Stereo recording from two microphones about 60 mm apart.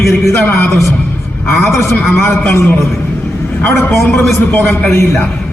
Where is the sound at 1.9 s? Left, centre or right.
Left.